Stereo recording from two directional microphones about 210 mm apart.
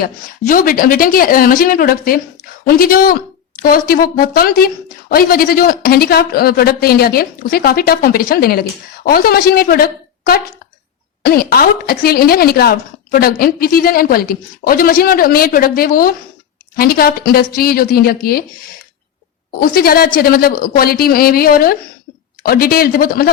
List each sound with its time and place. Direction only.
0.0 s a woman's voice: 40° left (ahead or behind)
19.5 s a woman's voice: 45° left (ahead or behind)